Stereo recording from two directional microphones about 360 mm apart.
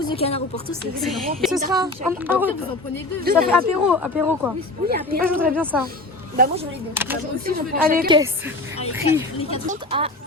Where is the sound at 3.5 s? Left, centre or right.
Centre.